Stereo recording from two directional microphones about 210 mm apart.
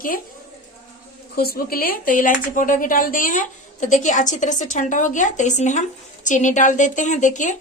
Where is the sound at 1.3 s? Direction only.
45° left (ahead or behind).